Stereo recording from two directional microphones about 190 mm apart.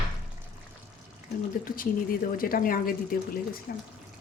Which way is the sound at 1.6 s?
50° left (ahead or behind).